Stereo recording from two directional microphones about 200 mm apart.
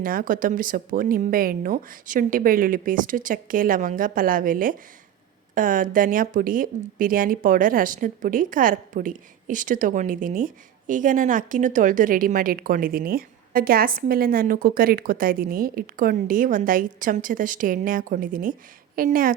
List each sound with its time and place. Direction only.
0.0 s speech: 45° right (ahead or behind)